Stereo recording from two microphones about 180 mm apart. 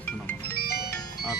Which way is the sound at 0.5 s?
60° left (ahead or behind).